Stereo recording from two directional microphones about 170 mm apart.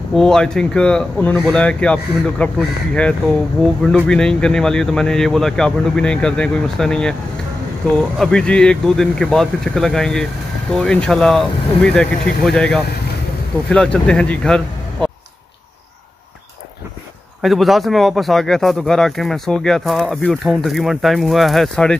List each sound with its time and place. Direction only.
0.1 s speech: 5° left (ahead or behind)
8.2 s speech: 5° left (ahead or behind)
17.4 s speech: centre (ahead or behind)